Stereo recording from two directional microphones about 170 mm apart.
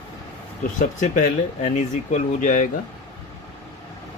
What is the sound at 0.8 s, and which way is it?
Speech, 50° left (ahead or behind).